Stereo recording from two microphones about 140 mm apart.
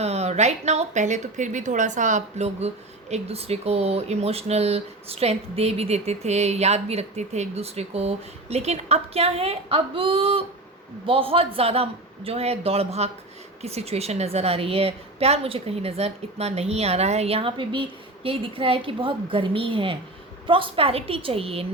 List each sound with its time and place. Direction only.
0.0 s a woman's voice: 50° right (ahead or behind)